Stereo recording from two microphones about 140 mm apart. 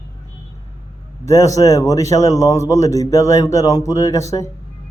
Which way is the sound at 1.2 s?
25° left (ahead or behind).